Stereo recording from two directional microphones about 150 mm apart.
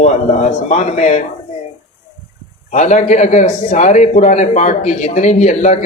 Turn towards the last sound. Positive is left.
turn(degrees=50)  # may be behind; listen again after turning